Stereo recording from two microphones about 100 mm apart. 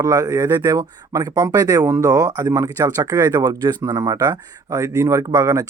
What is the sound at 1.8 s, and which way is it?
Speech, 25° right (ahead or behind).